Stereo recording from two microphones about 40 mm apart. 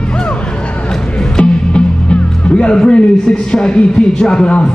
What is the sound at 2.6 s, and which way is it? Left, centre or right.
A man's voice, left.